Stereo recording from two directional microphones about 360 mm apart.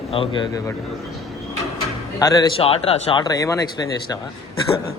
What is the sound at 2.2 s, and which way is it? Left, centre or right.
Speech, centre.